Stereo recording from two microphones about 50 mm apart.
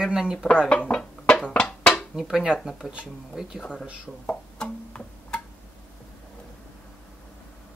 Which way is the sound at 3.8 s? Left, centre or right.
Right.